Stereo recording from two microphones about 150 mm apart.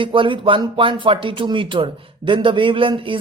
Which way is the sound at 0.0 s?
35° right (ahead or behind).